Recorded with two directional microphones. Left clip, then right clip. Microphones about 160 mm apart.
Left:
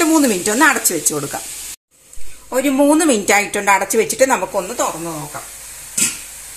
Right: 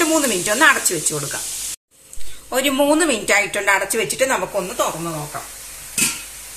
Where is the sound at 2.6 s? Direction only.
60° left (ahead or behind).